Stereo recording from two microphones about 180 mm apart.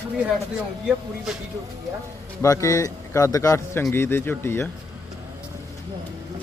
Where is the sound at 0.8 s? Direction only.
Centre (ahead or behind).